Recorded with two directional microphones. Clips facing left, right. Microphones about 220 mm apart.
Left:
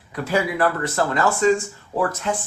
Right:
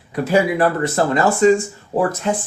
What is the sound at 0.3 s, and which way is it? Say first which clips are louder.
Speech: right 5 dB; 20° right (ahead or behind).